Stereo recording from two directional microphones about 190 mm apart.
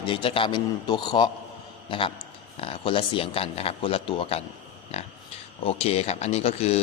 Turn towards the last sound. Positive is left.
turn(degrees=35)  # may be behind; listen again after turning